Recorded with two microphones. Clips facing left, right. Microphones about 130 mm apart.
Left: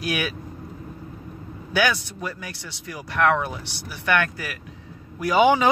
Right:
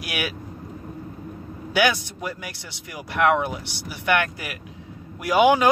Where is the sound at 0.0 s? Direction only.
10° right (ahead or behind).